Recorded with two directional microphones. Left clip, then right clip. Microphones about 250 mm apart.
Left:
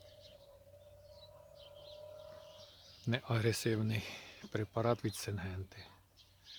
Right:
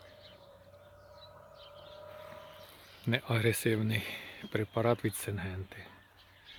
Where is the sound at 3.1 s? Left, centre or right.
Centre.